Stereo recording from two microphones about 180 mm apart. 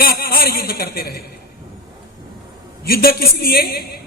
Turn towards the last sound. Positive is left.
turn(degrees=60)  # may be behind; listen again after turning